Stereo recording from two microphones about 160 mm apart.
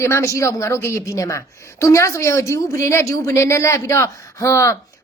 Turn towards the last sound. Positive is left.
turn(degrees=20)  # may be behind; listen again after turning